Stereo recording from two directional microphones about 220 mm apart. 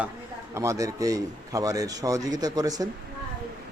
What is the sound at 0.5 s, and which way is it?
Speech, 15° right (ahead or behind).